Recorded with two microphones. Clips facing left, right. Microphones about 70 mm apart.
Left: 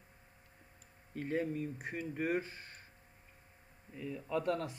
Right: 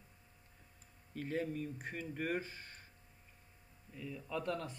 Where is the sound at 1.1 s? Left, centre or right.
Centre.